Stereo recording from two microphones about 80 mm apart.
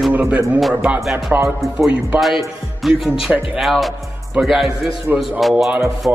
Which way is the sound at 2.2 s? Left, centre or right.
Centre.